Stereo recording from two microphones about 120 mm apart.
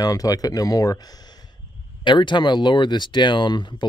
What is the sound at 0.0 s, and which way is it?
Speech, 30° left (ahead or behind).